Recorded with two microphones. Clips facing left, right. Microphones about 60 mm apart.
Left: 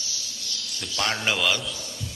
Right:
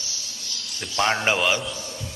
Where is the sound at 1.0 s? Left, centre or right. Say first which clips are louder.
Right 4 dB; right.